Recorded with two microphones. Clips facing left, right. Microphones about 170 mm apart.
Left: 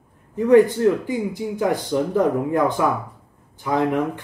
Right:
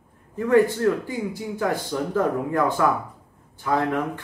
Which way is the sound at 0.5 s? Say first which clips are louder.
Left 4 dB; 15° left (ahead or behind).